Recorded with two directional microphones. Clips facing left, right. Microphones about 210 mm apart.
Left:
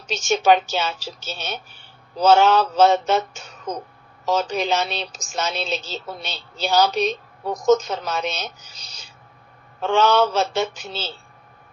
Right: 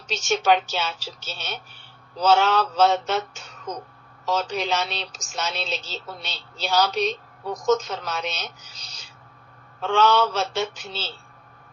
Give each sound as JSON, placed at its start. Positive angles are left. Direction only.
{"t": 0.1, "sound": "a woman's voice", "side_deg": 45}